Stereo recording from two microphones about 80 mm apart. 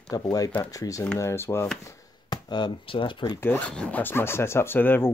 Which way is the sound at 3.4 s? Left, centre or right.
Left.